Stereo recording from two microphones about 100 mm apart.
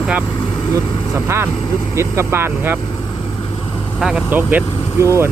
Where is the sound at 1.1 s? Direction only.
25° right (ahead or behind).